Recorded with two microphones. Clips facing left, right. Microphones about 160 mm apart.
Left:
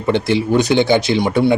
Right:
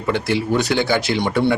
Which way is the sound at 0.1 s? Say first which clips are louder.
Left 4 dB; 20° left (ahead or behind).